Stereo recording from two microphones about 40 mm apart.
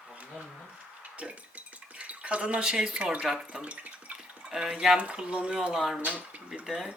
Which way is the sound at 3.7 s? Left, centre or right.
Right.